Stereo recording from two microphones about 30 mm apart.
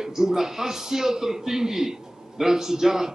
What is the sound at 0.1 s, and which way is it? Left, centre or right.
A man's voice, centre.